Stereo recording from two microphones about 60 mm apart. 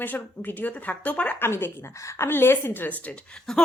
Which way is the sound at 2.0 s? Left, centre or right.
Left.